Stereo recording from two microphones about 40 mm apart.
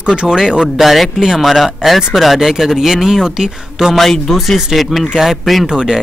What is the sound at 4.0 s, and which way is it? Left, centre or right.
Speech, centre.